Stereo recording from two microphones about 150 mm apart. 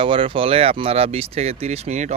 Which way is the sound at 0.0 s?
35° right (ahead or behind).